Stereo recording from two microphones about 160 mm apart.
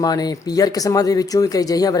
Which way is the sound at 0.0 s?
25° left (ahead or behind).